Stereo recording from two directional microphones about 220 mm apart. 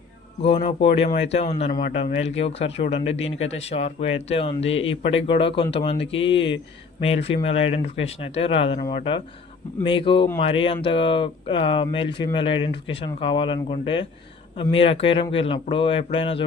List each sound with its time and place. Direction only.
0.4 s speech: 25° left (ahead or behind)